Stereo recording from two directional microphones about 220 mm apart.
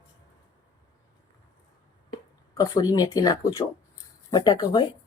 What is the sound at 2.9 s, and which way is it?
Speech, 15° left (ahead or behind).